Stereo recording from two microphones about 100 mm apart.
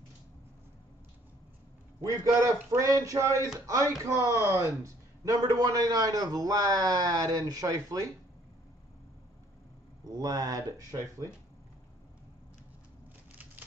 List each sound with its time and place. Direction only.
2.0 s a man's voice: 35° right (ahead or behind)
10.0 s a man's voice: 40° right (ahead or behind)